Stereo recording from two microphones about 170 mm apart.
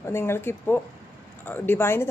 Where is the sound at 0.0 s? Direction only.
15° left (ahead or behind).